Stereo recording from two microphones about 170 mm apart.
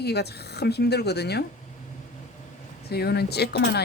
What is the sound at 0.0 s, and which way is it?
Speech, 75° left (ahead or behind).